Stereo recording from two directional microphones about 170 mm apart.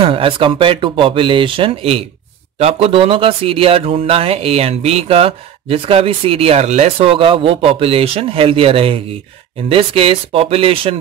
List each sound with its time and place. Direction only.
0.0 s speech: 30° right (ahead or behind)